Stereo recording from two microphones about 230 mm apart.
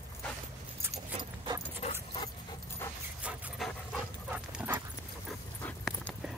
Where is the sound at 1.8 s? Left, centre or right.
Left.